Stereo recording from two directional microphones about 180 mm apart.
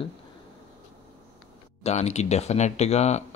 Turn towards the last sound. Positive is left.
turn(degrees=35)  # may be behind; listen again after turning